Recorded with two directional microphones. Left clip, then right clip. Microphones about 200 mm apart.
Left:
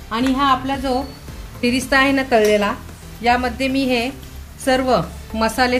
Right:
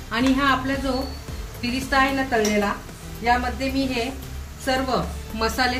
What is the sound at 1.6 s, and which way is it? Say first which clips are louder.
Speech: left 5 dB; 45° left (ahead or behind).